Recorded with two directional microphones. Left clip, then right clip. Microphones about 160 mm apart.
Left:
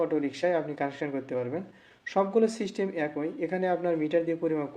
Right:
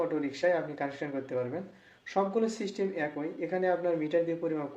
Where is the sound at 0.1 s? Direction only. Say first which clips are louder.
Left 2 dB; 50° left (ahead or behind).